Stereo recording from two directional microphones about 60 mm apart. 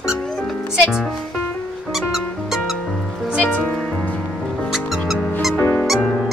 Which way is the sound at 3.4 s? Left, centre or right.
Left.